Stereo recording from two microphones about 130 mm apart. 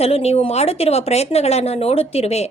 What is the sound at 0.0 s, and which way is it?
A woman's voice, 50° left (ahead or behind).